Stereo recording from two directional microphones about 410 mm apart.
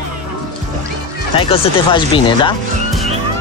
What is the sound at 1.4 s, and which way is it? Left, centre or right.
Speech, centre.